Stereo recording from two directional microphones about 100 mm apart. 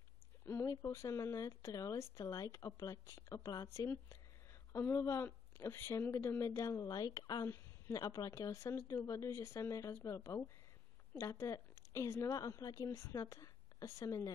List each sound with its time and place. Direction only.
0.7 s speech: 30° left (ahead or behind)
7.4 s a sound: 25° left (ahead or behind)
7.9 s a woman's voice: 35° left (ahead or behind)